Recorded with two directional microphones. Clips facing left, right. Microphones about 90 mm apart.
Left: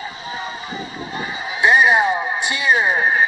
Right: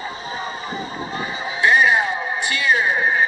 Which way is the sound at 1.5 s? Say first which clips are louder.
Left 2 dB; 20° left (ahead or behind).